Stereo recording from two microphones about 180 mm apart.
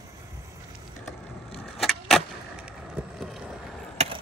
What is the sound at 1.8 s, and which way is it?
Vehicle, centre (ahead or behind).